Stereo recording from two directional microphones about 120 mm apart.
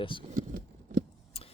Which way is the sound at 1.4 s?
55° left (ahead or behind).